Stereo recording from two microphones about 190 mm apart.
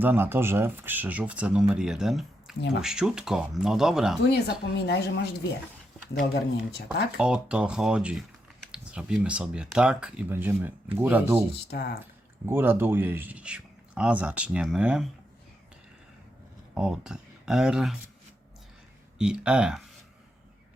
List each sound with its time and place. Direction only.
0.0 s speech: 10° right (ahead or behind)
4.3 s speech: 60° left (ahead or behind)
7.2 s speech: 5° right (ahead or behind)
11.7 s speech: 60° left (ahead or behind)
12.5 s speech: 10° right (ahead or behind)
16.7 s speech: 5° right (ahead or behind)
19.2 s speech: 5° right (ahead or behind)